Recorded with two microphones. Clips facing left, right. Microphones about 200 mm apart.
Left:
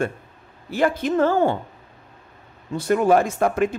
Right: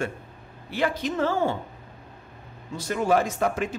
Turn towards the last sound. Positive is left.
turn(degrees=55)  # may be behind; listen again after turning